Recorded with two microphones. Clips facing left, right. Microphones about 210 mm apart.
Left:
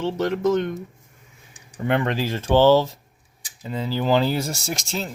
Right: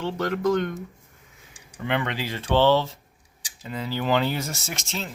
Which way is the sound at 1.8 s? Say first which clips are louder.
Left 5 dB; 45° left (ahead or behind).